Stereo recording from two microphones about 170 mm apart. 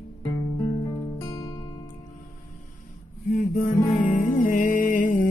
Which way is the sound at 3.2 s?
55° left (ahead or behind).